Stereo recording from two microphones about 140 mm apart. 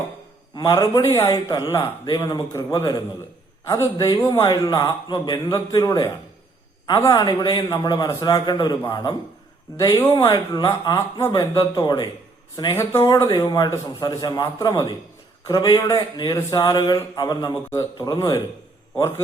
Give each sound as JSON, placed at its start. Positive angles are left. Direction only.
{"t": 0.5, "sound": "a man's voice", "side_deg": 30}
{"t": 3.9, "sound": "a man's voice", "side_deg": 30}
{"t": 12.7, "sound": "a man's voice", "side_deg": 20}